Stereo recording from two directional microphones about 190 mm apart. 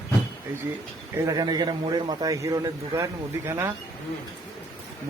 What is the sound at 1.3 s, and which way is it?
A man's voice, 20° right (ahead or behind).